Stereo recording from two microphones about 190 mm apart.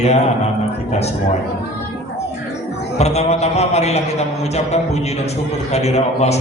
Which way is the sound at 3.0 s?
35° left (ahead or behind).